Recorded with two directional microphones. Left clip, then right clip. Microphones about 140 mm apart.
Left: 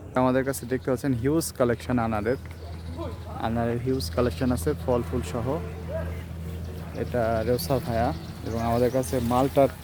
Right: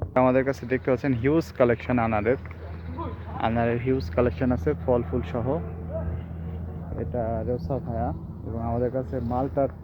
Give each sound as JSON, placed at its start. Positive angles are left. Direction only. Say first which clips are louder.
{"t": 0.1, "sound": "speech", "louder": "right 3 dB", "side_deg": 15}
{"t": 7.0, "sound": "speech", "louder": "left 4 dB", "side_deg": 45}
{"t": 8.9, "sound": "speech", "louder": "left 4 dB", "side_deg": 80}